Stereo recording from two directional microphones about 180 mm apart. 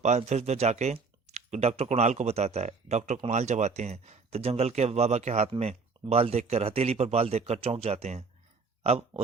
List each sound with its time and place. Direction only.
0.0 s speech: 40° right (ahead or behind)